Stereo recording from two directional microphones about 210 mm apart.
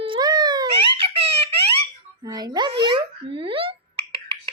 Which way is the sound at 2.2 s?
20° right (ahead or behind).